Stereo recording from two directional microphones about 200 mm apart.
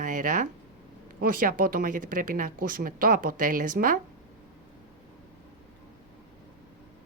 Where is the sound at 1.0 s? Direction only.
45° right (ahead or behind).